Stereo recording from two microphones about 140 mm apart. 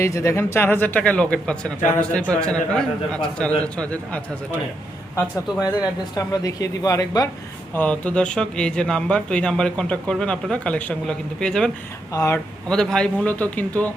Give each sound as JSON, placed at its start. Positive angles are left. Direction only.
{"t": 0.0, "sound": "speech", "side_deg": 20}
{"t": 5.5, "sound": "speech", "side_deg": -10}
{"t": 6.1, "sound": "speech", "side_deg": 25}
{"t": 7.7, "sound": "speech", "side_deg": 10}
{"t": 12.1, "sound": "speech", "side_deg": 20}
{"t": 12.6, "sound": "speech", "side_deg": 5}